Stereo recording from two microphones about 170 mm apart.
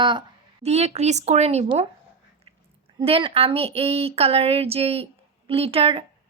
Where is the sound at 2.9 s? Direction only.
30° right (ahead or behind).